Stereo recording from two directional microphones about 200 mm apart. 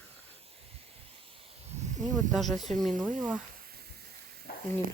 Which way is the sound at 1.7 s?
35° right (ahead or behind).